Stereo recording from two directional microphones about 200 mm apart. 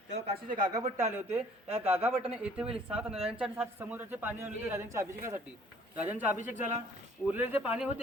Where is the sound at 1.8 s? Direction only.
10° right (ahead or behind).